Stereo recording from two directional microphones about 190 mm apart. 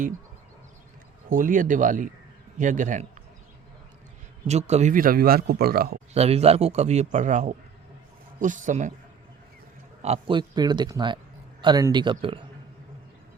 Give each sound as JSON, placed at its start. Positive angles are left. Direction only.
{"t": 1.3, "sound": "a man's voice", "side_deg": -45}
{"t": 4.4, "sound": "speech", "side_deg": -35}
{"t": 6.1, "sound": "a man's voice", "side_deg": -35}
{"t": 10.0, "sound": "speech", "side_deg": -30}